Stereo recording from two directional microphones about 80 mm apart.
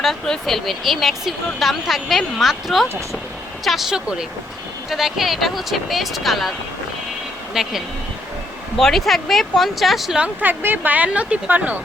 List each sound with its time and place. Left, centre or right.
0.0 s speech: centre
7.5 s speech: centre
8.8 s speech: centre
10.2 s speech: right